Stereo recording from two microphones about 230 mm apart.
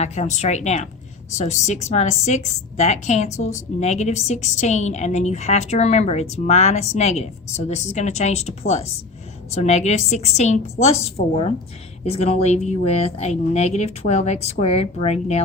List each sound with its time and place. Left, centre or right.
0.0 s a woman's voice: left
11.2 s a woman's voice: left
12.0 s a woman's voice: left